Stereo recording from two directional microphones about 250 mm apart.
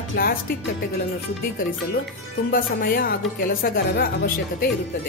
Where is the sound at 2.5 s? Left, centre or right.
Left.